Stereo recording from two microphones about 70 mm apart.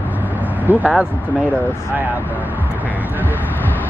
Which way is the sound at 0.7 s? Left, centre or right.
Right.